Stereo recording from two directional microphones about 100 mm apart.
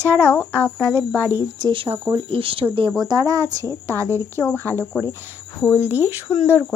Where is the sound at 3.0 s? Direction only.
40° right (ahead or behind).